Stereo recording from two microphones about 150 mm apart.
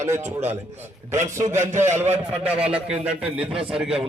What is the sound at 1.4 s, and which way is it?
Speech, 20° right (ahead or behind).